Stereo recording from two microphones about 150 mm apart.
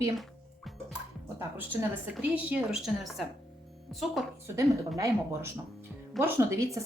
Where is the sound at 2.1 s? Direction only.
10° right (ahead or behind).